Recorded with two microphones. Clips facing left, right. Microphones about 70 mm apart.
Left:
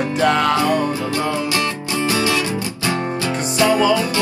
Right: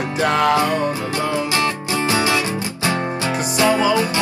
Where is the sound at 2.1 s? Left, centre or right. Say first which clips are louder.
Right 1 dB; right.